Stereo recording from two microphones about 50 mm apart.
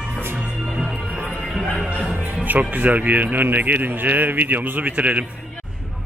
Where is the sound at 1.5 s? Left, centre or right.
Centre.